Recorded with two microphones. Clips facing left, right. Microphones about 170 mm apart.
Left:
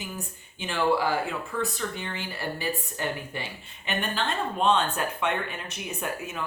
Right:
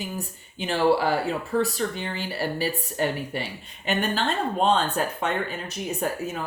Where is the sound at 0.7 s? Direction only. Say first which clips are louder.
Right 3 dB; 35° right (ahead or behind).